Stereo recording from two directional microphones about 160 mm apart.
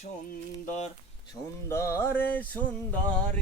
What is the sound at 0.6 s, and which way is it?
Speech, 45° left (ahead or behind).